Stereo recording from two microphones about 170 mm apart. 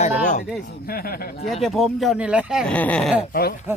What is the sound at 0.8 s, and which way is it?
Speech, 60° left (ahead or behind).